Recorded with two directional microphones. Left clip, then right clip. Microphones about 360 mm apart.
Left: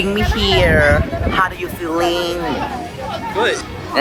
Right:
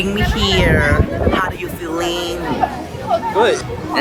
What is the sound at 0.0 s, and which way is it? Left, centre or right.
Speech, centre.